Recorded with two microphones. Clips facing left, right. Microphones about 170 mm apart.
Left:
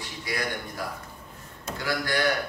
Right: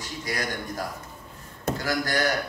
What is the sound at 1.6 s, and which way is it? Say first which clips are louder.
Speech: right 3 dB; 40° right (ahead or behind).